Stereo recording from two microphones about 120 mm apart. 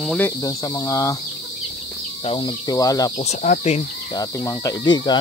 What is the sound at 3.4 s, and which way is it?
Speech, 90° left.